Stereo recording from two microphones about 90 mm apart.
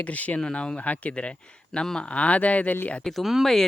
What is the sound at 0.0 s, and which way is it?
Speech, 15° left (ahead or behind).